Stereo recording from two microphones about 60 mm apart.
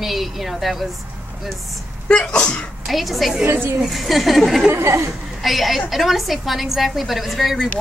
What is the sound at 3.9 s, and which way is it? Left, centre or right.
Speech, centre.